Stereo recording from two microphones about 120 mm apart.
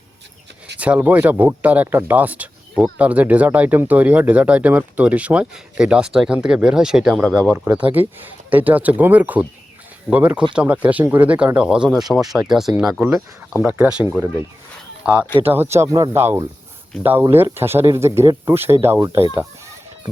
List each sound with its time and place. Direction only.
0.8 s speech: 10° right (ahead or behind)
13.6 s speech: 15° right (ahead or behind)
15.5 s speech: 20° right (ahead or behind)